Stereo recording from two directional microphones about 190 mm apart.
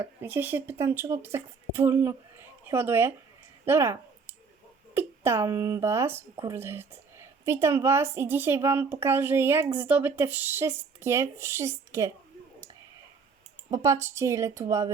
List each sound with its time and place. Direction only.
0.0 s a woman's voice: 10° right (ahead or behind)
3.7 s a sound: 15° right (ahead or behind)
4.9 s a woman's voice: 10° right (ahead or behind)
13.7 s a woman's voice: 15° right (ahead or behind)